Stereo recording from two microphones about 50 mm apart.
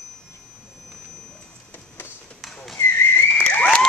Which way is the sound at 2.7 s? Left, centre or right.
Left.